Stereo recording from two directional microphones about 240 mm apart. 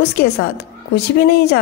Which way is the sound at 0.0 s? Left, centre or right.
Left.